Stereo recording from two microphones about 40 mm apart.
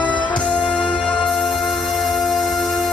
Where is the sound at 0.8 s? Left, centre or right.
Left.